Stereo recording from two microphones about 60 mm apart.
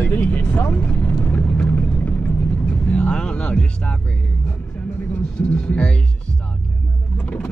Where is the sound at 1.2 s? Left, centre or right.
Left.